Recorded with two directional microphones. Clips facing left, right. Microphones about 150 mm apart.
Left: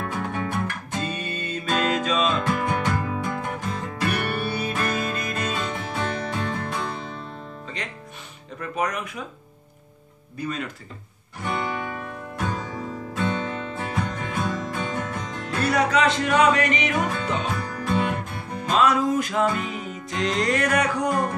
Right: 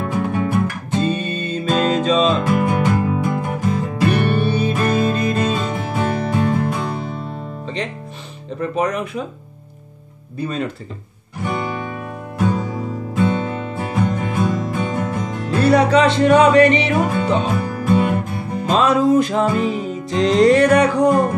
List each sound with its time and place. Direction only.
0.0 s music: 10° right (ahead or behind)
0.9 s music: 30° right (ahead or behind)
2.4 s music: 10° right (ahead or behind)
4.0 s music: 25° right (ahead or behind)
5.7 s music: 5° right (ahead or behind)
7.6 s music: 25° right (ahead or behind)
10.3 s music: 30° right (ahead or behind)
11.4 s music: 10° right (ahead or behind)
15.5 s music: 30° right (ahead or behind)
17.5 s music: 10° right (ahead or behind)
18.7 s music: 30° right (ahead or behind)